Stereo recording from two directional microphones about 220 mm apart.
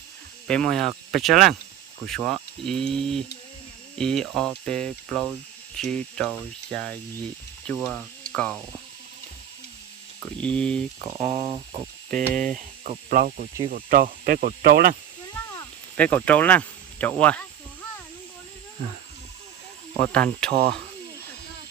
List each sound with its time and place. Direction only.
0.4 s speech: 5° left (ahead or behind)
10.4 s speech: 5° left (ahead or behind)
11.2 s speech: 25° right (ahead or behind)
12.1 s speech: 35° right (ahead or behind)
15.5 s speech: 5° left (ahead or behind)
20.1 s speech: 5° left (ahead or behind)
20.6 s speech: 45° right (ahead or behind)